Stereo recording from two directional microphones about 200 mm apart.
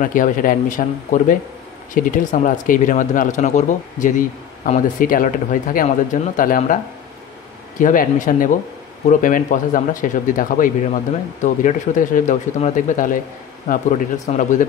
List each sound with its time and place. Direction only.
0.0 s speech: 40° left (ahead or behind)
7.8 s speech: 40° left (ahead or behind)